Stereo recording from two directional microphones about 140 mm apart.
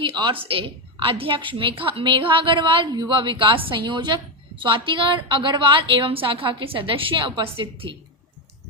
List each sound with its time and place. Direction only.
0.0 s a woman's voice: 35° right (ahead or behind)